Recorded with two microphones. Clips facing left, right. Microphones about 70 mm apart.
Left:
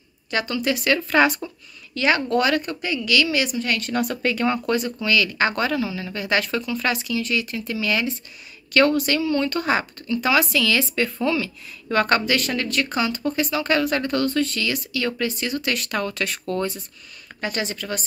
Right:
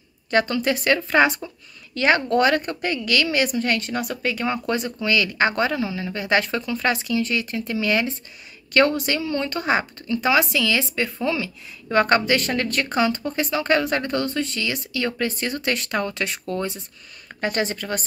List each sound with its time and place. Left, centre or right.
0.3 s speech: right
3.9 s speech: centre
4.6 s a woman's voice: right
17.4 s speech: right